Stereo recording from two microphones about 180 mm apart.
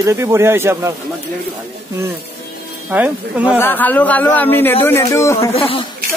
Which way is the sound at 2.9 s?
10° right (ahead or behind).